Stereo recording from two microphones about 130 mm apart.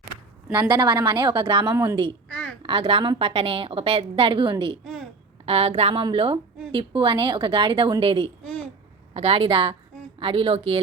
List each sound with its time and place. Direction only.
0.7 s a woman's voice: 35° right (ahead or behind)
1.7 s a woman's voice: 20° right (ahead or behind)
2.3 s a sound: 5° left (ahead or behind)
2.6 s a woman's voice: 45° right (ahead or behind)
5.5 s a woman's voice: 50° right (ahead or behind)